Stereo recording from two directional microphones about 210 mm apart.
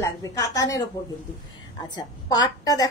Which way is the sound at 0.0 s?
15° left (ahead or behind).